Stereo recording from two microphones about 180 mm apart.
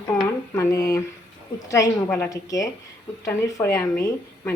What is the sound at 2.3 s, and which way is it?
A woman's voice, 20° left (ahead or behind).